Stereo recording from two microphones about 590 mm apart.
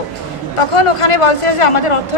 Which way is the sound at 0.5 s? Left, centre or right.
Left.